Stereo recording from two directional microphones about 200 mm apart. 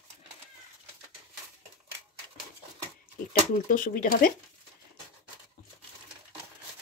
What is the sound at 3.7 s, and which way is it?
Speech, 40° left (ahead or behind).